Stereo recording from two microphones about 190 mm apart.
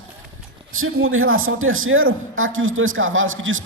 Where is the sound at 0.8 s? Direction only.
90° right.